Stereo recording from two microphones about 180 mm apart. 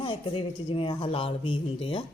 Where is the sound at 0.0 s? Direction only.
25° left (ahead or behind).